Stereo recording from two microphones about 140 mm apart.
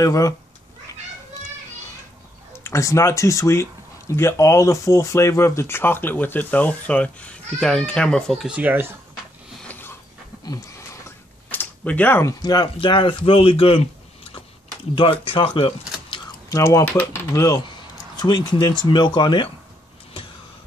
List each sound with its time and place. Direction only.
0.0 s speech: 20° left (ahead or behind)
2.5 s speech: 20° left (ahead or behind); by 8.5 s 5° left (ahead or behind)
8.5 s speech: 10° right (ahead or behind)
9.7 s a sound: 15° left (ahead or behind)
10.4 s speech: 25° left (ahead or behind); by 13.8 s 40° left (ahead or behind)
15.0 s speech: 40° left (ahead or behind)
16.8 s speech: 15° left (ahead or behind); by 19.5 s 35° left (ahead or behind)